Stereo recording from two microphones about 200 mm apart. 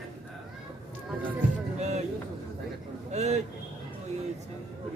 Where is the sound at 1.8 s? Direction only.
35° right (ahead or behind).